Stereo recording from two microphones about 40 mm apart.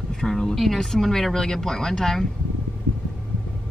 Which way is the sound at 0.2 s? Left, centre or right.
Centre.